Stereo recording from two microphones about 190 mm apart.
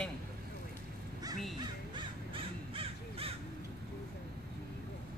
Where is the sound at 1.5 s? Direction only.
25° right (ahead or behind).